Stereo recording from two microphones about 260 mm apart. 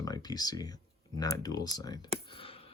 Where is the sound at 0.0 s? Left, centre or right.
Centre.